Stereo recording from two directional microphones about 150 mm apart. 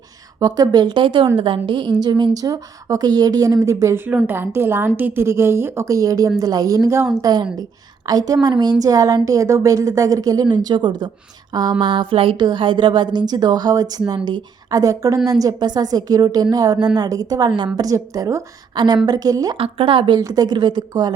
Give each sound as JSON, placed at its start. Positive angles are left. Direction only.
{"t": 0.3, "sound": "a woman's voice", "side_deg": -25}
{"t": 19.5, "sound": "a woman's voice", "side_deg": -35}